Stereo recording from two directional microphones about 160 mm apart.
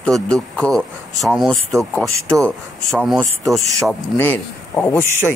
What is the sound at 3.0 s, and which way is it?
Speech, centre (ahead or behind).